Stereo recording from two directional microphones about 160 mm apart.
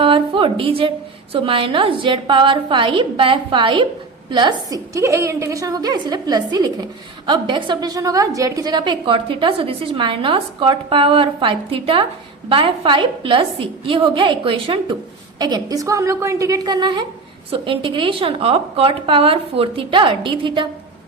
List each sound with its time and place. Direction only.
0.0 s a woman's voice: 35° right (ahead or behind)